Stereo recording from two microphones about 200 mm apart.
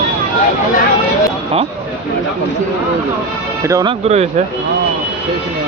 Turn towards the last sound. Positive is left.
turn(degrees=-30)  # may be behind; listen again after turning